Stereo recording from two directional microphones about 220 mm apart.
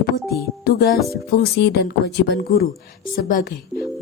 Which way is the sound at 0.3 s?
45° left (ahead or behind).